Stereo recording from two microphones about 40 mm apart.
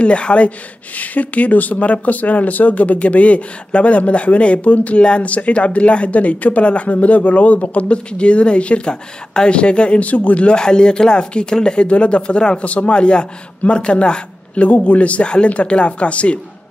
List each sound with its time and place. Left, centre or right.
0.0 s speech: left
0.9 s speech: left
10.0 s speech: left
10.4 s a man's voice: left
14.6 s speech: left